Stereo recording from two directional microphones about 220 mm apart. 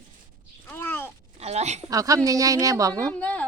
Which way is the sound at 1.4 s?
30° right (ahead or behind).